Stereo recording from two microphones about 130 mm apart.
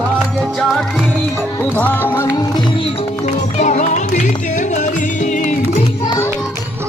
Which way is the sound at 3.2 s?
70° left (ahead or behind).